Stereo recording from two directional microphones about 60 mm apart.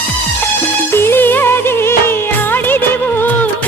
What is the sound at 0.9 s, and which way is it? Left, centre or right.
Music, left.